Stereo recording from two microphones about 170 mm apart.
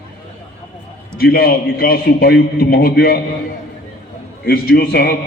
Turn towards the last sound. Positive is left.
turn(degrees=65)  # may be behind; listen again after turning